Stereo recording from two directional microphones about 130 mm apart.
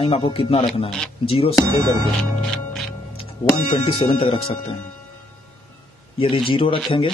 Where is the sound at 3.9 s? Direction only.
45° left (ahead or behind).